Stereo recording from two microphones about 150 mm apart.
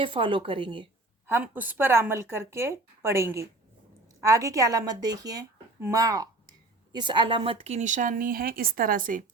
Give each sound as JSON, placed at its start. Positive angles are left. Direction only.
{"t": 0.0, "sound": "speech", "side_deg": -35}
{"t": 1.3, "sound": "a woman's voice", "side_deg": -10}